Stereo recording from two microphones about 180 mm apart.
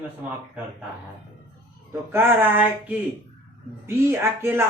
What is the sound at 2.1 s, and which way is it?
Speech, 10° right (ahead or behind).